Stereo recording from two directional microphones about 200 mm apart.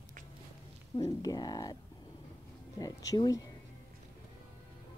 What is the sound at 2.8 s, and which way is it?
Speech, 20° left (ahead or behind).